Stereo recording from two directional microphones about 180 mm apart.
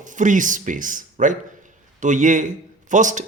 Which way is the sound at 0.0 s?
45° right (ahead or behind).